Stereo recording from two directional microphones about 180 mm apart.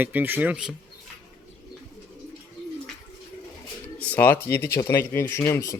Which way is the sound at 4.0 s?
10° left (ahead or behind).